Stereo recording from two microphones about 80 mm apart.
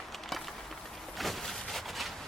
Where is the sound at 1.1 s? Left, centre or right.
Centre.